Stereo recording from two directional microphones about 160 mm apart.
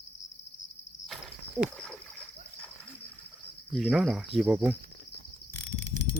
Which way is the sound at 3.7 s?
5° right (ahead or behind).